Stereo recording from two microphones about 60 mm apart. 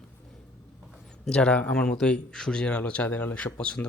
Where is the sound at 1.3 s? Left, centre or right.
Centre.